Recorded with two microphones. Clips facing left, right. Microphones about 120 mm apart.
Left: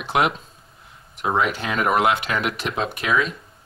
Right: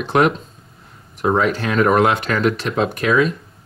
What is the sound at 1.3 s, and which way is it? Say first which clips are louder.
Speech: right 4 dB; 5° left (ahead or behind).